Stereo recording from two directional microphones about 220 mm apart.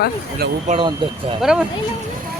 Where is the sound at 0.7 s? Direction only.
25° right (ahead or behind).